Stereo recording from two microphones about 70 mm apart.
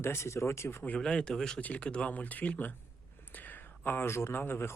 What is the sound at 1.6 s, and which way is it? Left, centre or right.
Speech, centre.